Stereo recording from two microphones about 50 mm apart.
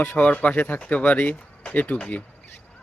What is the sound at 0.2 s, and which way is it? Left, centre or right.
Speech, left.